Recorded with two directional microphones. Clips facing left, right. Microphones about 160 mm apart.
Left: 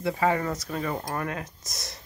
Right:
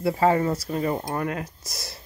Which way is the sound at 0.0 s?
30° right (ahead or behind).